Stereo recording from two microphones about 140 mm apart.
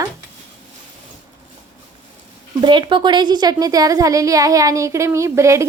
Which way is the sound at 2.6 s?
35° right (ahead or behind).